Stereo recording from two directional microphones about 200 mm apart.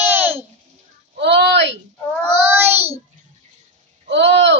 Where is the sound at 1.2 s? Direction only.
60° right (ahead or behind).